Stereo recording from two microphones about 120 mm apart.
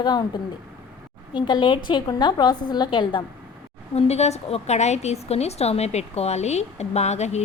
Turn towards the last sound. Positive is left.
turn(degrees=65)  # may be behind; listen again after turning